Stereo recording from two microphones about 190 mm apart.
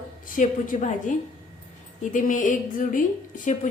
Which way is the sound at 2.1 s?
45° left (ahead or behind).